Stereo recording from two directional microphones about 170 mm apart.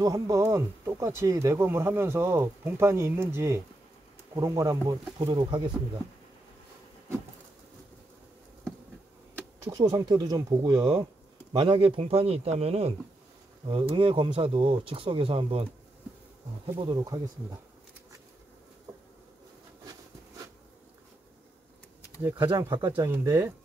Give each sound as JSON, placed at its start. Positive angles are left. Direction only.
{"t": 0.0, "sound": "speech", "side_deg": -20}
{"t": 9.7, "sound": "speech", "side_deg": -20}
{"t": 16.8, "sound": "speech", "side_deg": -25}
{"t": 22.2, "sound": "speech", "side_deg": -10}